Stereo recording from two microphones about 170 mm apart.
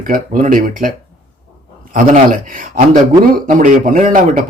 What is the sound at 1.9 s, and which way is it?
Speech, 50° right (ahead or behind).